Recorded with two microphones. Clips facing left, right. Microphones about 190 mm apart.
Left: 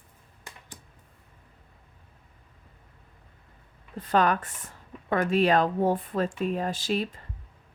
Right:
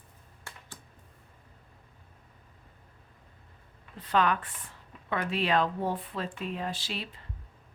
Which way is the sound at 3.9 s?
45° left (ahead or behind).